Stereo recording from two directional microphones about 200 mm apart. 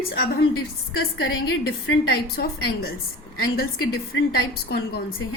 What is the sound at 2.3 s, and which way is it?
A woman's voice, 50° left (ahead or behind).